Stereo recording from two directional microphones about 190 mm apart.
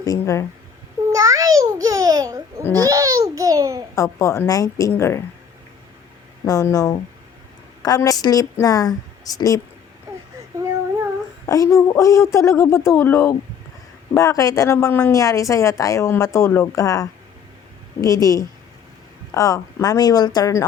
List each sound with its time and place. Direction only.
0.0 s speech: 15° left (ahead or behind)
1.1 s babbling: 15° right (ahead or behind)
3.9 s a woman's voice: 15° left (ahead or behind)
6.4 s a woman's voice: 15° left (ahead or behind)
11.4 s a woman's voice: 15° left (ahead or behind)